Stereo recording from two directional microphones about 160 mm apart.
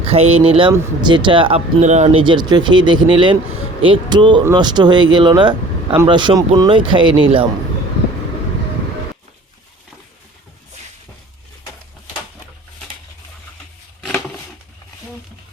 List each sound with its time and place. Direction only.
0.0 s speech: 40° right (ahead or behind)
1.8 s speech: 45° right (ahead or behind)